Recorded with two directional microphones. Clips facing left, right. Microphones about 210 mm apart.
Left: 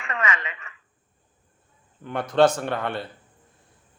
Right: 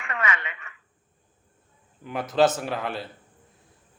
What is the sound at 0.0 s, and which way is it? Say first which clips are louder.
Speech: left 1 dB; 25° left (ahead or behind).